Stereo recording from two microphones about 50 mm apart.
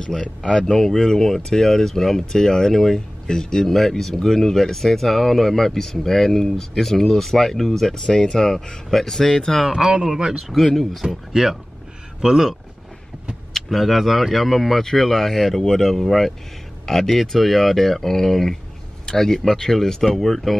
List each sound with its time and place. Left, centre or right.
0.0 s speech: centre
0.7 s speech: centre
9.7 s speech: centre
10.5 s speech: centre
13.5 s speech: centre